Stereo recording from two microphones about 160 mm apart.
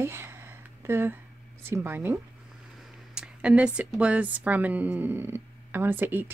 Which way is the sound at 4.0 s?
10° right (ahead or behind).